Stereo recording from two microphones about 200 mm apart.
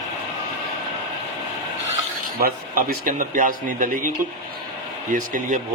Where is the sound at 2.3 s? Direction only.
50° right (ahead or behind).